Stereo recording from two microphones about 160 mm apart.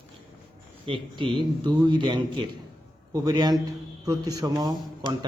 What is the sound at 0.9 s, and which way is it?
Speech, 30° right (ahead or behind).